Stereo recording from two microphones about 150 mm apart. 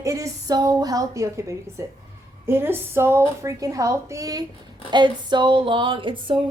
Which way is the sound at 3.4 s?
20° right (ahead or behind).